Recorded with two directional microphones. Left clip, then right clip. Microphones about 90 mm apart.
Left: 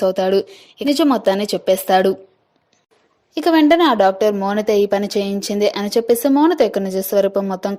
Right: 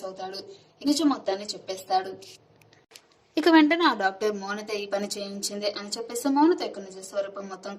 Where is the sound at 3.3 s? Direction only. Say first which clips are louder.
Left 6 dB; 65° left (ahead or behind).